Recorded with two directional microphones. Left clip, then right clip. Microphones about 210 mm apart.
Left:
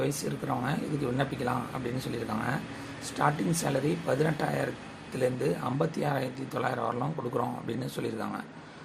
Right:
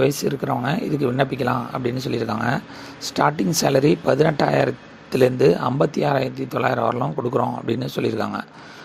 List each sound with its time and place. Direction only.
0.0 s speech: 35° right (ahead or behind)